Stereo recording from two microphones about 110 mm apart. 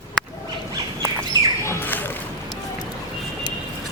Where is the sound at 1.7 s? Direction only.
20° left (ahead or behind).